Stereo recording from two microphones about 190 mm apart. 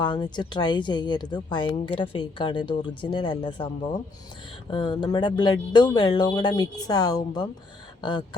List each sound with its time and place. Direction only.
0.0 s a woman's voice: 25° left (ahead or behind)
4.7 s a woman's voice: 25° left (ahead or behind)